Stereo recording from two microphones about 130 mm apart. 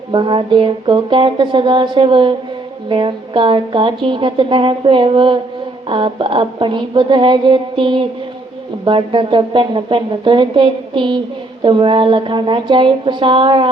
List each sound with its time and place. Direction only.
0.1 s a woman's voice: 40° right (ahead or behind)